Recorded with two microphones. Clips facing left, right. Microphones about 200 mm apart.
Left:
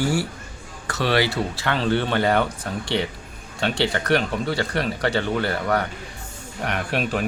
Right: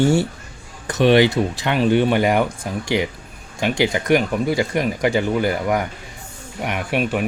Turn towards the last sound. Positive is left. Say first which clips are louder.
# right 3 dB
turn(degrees=-10)  # may be behind; listen again after turning